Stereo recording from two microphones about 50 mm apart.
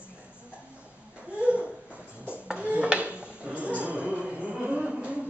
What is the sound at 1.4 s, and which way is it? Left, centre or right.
A woman's voice, right.